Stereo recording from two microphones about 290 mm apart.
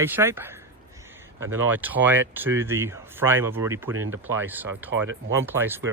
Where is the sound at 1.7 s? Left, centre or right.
Centre.